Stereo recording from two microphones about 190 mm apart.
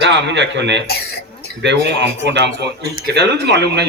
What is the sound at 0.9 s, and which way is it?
Cough, 55° left (ahead or behind).